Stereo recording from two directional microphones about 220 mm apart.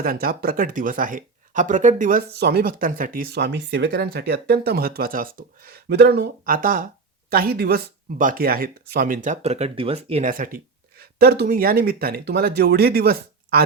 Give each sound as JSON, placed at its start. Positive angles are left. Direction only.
{"t": 0.0, "sound": "speech", "side_deg": -40}